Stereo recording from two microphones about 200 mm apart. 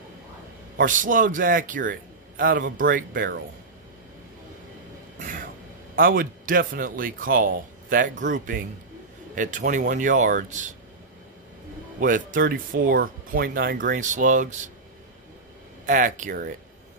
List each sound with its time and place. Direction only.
0.7 s speech: 40° right (ahead or behind)
5.2 s train: 45° right (ahead or behind)
5.9 s speech: 45° right (ahead or behind)
12.0 s speech: 40° right (ahead or behind)
15.8 s speech: 40° right (ahead or behind)